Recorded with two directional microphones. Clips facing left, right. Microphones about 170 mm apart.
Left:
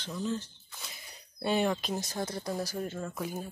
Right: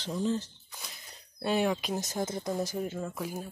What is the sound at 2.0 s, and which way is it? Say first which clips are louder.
Speech: right 2 dB; 20° right (ahead or behind).